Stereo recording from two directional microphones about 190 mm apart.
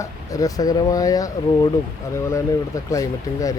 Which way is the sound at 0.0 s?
20° left (ahead or behind).